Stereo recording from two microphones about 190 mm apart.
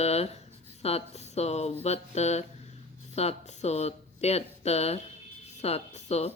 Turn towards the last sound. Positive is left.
turn(degrees=35)  # may be behind; listen again after turning